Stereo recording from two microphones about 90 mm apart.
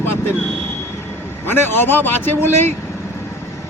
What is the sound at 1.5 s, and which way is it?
Speech, 25° left (ahead or behind).